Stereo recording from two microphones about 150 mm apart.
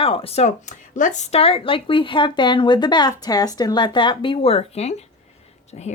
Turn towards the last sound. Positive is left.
turn(degrees=45)  # may be behind; listen again after turning